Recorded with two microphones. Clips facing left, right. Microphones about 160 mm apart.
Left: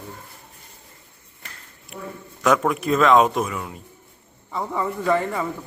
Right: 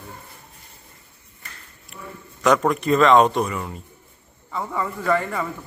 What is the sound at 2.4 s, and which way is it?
A man's voice, centre (ahead or behind).